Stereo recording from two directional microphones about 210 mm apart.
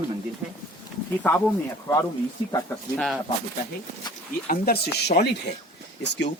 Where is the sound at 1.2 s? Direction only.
5° left (ahead or behind).